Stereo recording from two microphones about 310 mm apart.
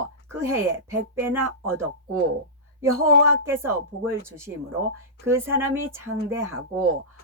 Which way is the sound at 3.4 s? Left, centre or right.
Centre.